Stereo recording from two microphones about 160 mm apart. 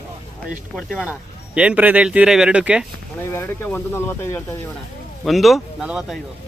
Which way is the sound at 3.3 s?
15° left (ahead or behind).